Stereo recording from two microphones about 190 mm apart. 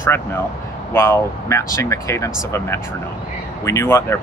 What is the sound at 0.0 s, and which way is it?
Speech, 10° left (ahead or behind).